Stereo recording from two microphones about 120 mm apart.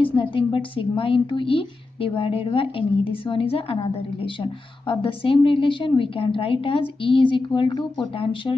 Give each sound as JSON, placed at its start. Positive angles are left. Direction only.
{"t": 0.0, "sound": "a woman's voice", "side_deg": 45}